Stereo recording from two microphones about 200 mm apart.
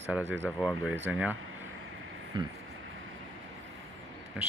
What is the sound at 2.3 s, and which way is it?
Speech, 20° right (ahead or behind).